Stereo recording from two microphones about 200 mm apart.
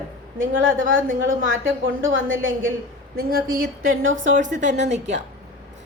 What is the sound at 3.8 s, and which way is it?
Speech, 80° right.